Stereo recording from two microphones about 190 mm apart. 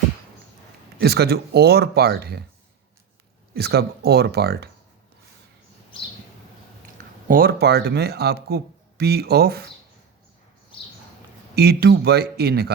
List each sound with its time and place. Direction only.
0.9 s speech: 55° right (ahead or behind)
3.5 s speech: 55° right (ahead or behind)
7.3 s speech: 50° right (ahead or behind)
11.5 s speech: 55° right (ahead or behind)